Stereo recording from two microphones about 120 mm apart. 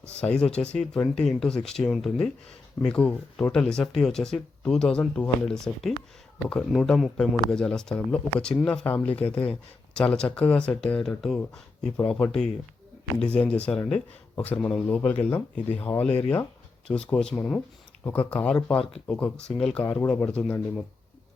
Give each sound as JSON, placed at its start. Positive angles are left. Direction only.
{"t": 0.2, "sound": "speech", "side_deg": 10}
{"t": 6.7, "sound": "speech", "side_deg": 0}
{"t": 17.3, "sound": "speech", "side_deg": 20}